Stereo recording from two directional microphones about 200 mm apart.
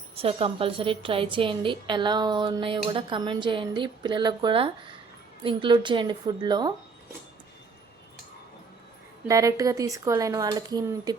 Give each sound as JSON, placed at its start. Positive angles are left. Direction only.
{"t": 0.2, "sound": "a woman's voice", "side_deg": -30}
{"t": 9.2, "sound": "speech", "side_deg": -15}